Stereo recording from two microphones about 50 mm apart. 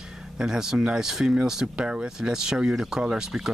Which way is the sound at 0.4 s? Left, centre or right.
Centre.